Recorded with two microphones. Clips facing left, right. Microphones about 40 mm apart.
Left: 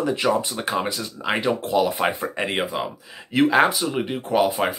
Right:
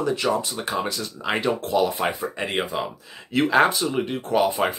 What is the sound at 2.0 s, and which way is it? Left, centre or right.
Speech, left.